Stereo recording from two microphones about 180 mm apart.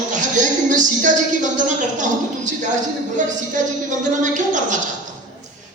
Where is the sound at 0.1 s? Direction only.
45° right (ahead or behind).